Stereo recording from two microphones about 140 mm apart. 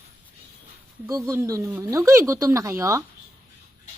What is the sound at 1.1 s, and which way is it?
Speech, 25° right (ahead or behind).